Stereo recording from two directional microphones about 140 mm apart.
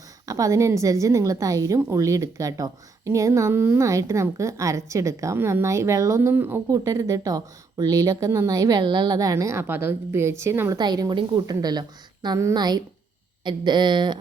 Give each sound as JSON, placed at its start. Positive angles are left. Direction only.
{"t": 0.3, "sound": "a woman's voice", "side_deg": -25}
{"t": 10.8, "sound": "a woman's voice", "side_deg": -30}